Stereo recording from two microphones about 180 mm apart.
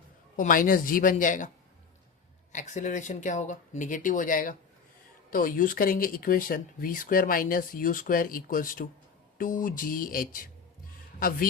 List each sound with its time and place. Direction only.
0.3 s speech: 50° left (ahead or behind)
2.5 s speech: 45° left (ahead or behind)